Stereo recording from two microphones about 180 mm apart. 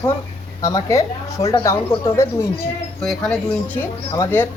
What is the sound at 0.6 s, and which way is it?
Speech, 20° left (ahead or behind).